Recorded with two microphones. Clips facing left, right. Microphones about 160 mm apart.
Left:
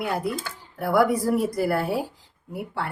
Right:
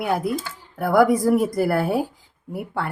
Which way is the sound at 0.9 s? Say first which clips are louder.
Right 4 dB; 45° right (ahead or behind).